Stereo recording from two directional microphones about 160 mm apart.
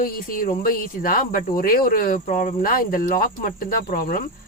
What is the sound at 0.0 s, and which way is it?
Speech, 65° left (ahead or behind).